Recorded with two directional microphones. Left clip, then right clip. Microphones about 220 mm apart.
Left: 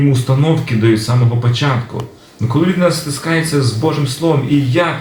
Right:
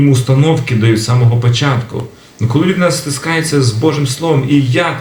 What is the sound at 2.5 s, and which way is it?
Speech, 50° right (ahead or behind).